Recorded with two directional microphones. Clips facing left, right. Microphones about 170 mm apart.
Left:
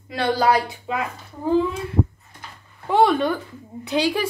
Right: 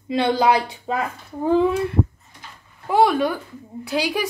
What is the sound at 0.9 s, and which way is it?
Speech, 35° right (ahead or behind).